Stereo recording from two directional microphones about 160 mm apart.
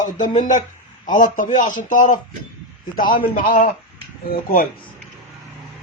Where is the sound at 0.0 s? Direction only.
50° left (ahead or behind).